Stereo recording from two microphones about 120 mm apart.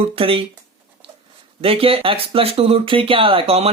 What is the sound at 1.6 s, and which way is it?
Speech, 50° right (ahead or behind).